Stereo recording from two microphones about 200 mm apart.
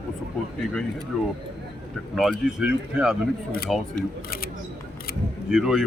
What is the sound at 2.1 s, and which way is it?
Speech, centre (ahead or behind).